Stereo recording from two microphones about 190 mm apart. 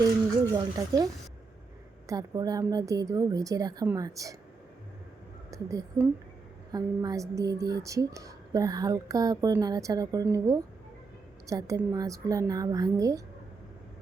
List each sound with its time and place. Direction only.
0.5 s a woman's voice: 20° right (ahead or behind)
5.5 s a woman's voice: 15° right (ahead or behind)